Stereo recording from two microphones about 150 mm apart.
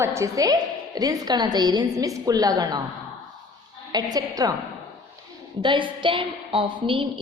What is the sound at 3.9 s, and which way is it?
Speech, 25° right (ahead or behind).